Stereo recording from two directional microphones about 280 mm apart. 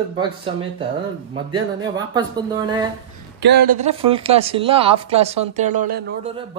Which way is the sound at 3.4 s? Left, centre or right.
Right.